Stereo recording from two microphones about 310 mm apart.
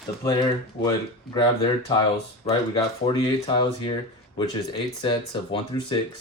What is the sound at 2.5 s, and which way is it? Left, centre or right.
Speech, centre.